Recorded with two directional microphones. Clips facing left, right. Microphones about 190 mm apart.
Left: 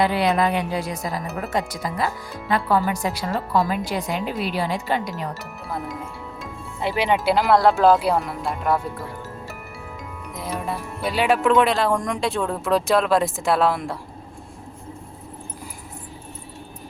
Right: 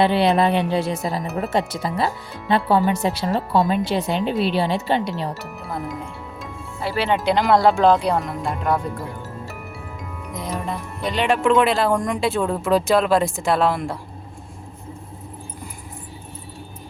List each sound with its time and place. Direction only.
0.0 s speech: 25° right (ahead or behind)
5.7 s speech: centre (ahead or behind)
6.8 s speech: 15° left (ahead or behind)
10.3 s speech: 5° left (ahead or behind)